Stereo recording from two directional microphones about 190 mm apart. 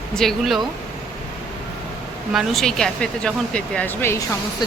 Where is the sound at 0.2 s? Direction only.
Centre (ahead or behind).